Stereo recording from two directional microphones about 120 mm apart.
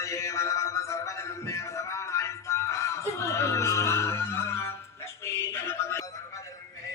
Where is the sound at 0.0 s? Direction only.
25° left (ahead or behind).